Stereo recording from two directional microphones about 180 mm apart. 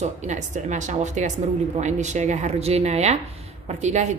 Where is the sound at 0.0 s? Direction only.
40° right (ahead or behind).